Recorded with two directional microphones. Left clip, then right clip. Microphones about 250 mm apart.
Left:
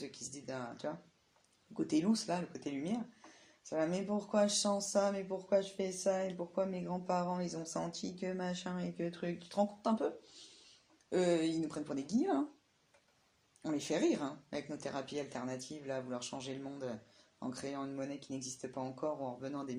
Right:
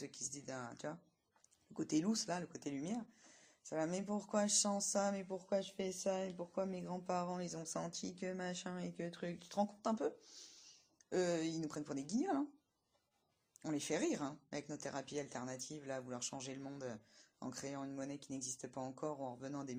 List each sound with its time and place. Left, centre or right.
0.1 s speech: right
11.1 s speech: right
13.6 s speech: right